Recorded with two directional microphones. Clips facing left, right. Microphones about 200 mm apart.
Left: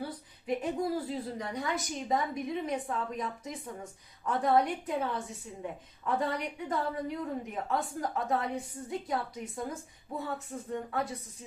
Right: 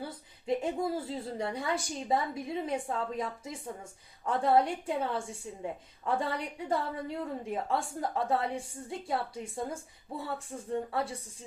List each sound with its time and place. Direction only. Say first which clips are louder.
0.4 s a woman's voice: right 1 dB; 25° right (ahead or behind)